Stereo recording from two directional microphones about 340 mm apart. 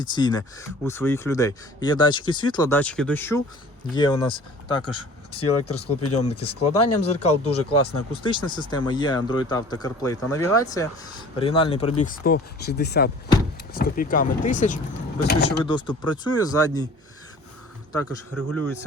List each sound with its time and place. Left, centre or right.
0.0 s speech: centre; by 15.4 s left
15.6 s speech: centre
17.9 s speech: centre